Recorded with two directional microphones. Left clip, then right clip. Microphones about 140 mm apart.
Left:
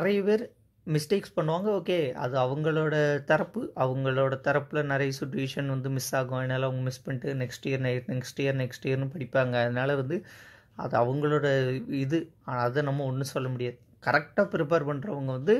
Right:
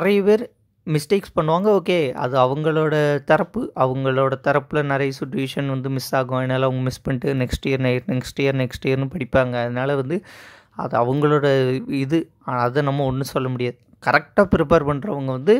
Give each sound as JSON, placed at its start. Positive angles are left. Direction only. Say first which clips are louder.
{"t": 0.0, "sound": "speech", "louder": "right 9 dB", "side_deg": -35}
{"t": 9.5, "sound": "speech", "louder": "right 5 dB", "side_deg": -20}
{"t": 11.1, "sound": "speech", "louder": "right 9 dB", "side_deg": -40}